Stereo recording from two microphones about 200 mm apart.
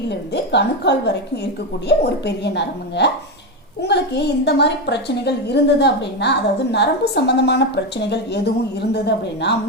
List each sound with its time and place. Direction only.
0.1 s a woman's voice: 60° left (ahead or behind)